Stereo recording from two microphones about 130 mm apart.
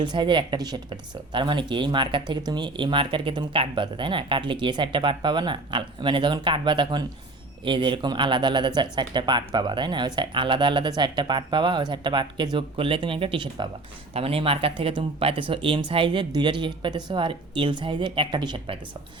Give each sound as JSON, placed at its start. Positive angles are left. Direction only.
{"t": 0.0, "sound": "speech", "side_deg": -35}